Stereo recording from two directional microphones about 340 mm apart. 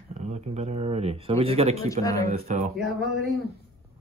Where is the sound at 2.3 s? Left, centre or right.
Centre.